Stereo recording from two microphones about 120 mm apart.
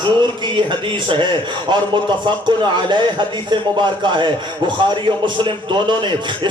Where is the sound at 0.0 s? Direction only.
40° right (ahead or behind).